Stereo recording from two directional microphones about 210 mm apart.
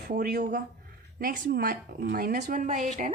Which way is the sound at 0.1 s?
45° right (ahead or behind).